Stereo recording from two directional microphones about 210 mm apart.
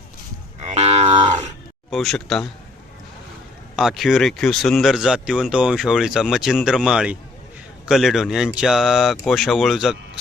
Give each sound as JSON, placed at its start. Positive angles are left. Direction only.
{"t": 0.7, "sound": "livestock", "side_deg": -30}
{"t": 1.9, "sound": "a man's voice", "side_deg": 0}
{"t": 3.8, "sound": "speech", "side_deg": 0}